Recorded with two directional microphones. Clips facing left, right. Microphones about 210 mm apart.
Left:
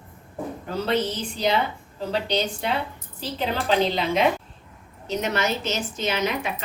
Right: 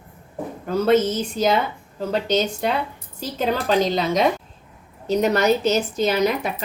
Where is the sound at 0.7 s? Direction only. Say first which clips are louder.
Right 7 dB; 45° right (ahead or behind).